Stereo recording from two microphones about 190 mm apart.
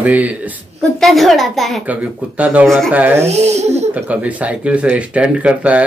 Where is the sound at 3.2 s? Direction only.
35° right (ahead or behind).